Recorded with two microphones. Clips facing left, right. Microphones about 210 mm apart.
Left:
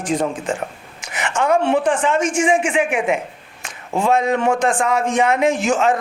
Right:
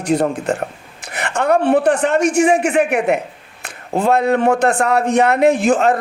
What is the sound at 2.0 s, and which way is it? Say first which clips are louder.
A man's voice: right 4 dB; 65° right (ahead or behind).